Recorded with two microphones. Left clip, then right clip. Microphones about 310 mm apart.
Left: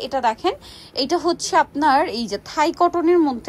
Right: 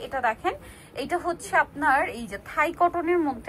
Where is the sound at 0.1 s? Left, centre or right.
Centre.